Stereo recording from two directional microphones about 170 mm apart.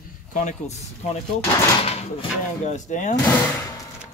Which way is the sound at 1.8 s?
35° left (ahead or behind).